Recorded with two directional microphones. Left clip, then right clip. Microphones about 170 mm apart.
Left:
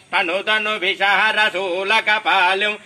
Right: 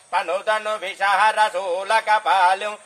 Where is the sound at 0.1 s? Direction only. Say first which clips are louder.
Left 3 dB; 25° right (ahead or behind).